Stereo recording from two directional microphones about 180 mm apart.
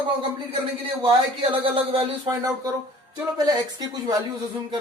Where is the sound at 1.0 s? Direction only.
30° right (ahead or behind).